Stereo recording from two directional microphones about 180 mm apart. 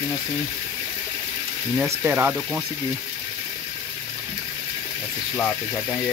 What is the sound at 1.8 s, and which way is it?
Speech, 10° right (ahead or behind).